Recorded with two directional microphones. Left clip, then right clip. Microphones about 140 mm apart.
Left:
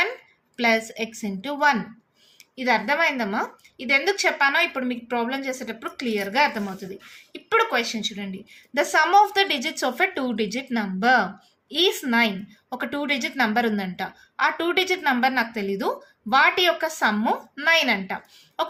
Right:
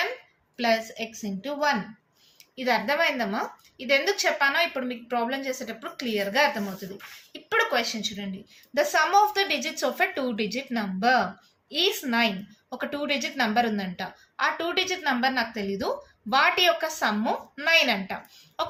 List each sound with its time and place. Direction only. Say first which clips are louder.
0.5 s a woman's voice: left 3 dB; 50° left (ahead or behind)
2.6 s a woman's voice: left 3 dB; 40° left (ahead or behind)